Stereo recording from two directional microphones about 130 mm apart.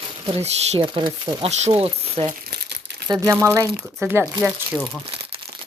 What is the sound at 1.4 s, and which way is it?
Speech, 60° right (ahead or behind).